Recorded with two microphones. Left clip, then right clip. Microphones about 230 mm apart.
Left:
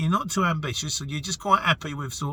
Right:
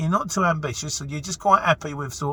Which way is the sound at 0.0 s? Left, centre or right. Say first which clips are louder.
Right 3 dB; left.